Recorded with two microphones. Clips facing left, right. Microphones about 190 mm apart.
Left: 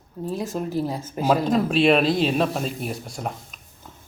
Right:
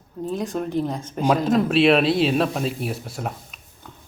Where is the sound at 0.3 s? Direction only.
Centre (ahead or behind).